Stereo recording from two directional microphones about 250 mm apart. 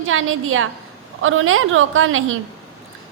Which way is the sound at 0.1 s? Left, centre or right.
Right.